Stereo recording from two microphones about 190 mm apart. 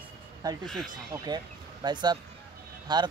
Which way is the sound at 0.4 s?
20° right (ahead or behind).